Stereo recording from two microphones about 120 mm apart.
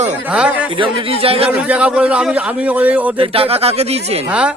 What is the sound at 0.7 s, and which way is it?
Speech, 45° right (ahead or behind).